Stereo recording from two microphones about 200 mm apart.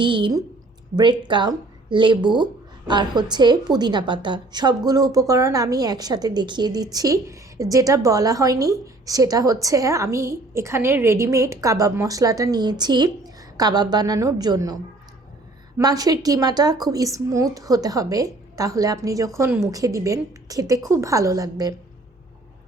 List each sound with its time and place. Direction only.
0.0 s a woman's voice: 25° right (ahead or behind)
15.8 s a woman's voice: 20° right (ahead or behind)